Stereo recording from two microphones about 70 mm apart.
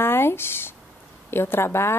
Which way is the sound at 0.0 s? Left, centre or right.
Left.